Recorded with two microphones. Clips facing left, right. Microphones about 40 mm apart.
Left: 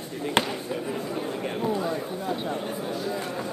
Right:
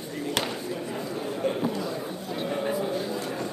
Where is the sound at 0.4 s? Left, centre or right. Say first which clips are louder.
Left 6 dB; centre.